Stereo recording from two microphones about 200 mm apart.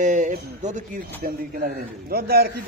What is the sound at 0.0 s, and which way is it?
Speech, 40° right (ahead or behind).